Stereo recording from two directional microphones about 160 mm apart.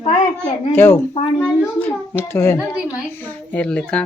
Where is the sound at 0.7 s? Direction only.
15° left (ahead or behind).